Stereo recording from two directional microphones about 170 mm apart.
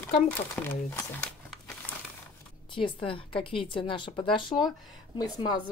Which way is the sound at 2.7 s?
30° left (ahead or behind).